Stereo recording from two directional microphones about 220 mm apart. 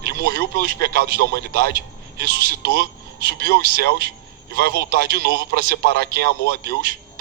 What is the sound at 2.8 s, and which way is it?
Speech, 45° right (ahead or behind).